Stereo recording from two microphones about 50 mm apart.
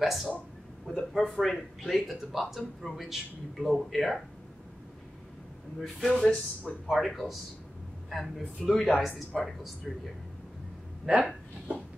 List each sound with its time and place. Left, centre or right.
0.0 s speech: centre
5.8 s speech: centre
11.1 s speech: centre